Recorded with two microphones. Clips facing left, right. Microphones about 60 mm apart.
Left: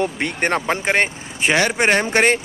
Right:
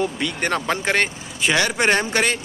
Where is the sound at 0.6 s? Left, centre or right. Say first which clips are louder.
Left 2 dB; left.